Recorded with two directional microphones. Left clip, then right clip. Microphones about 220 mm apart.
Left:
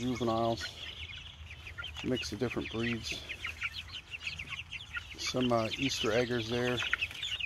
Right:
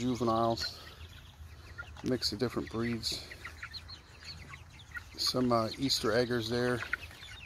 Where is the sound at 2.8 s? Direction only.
10° left (ahead or behind).